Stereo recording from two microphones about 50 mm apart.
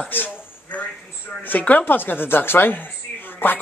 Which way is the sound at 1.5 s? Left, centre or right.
Left.